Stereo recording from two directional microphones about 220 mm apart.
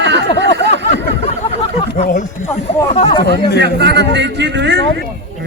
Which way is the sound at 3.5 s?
50° right (ahead or behind).